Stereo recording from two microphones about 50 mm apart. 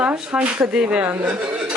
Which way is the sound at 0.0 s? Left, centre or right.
Right.